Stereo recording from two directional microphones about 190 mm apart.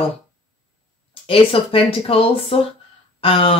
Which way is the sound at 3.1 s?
30° left (ahead or behind).